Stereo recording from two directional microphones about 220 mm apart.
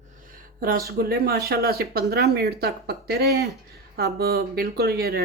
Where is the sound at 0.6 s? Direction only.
40° right (ahead or behind).